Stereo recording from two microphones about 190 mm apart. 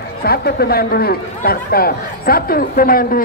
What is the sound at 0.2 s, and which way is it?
Speech, 55° left (ahead or behind).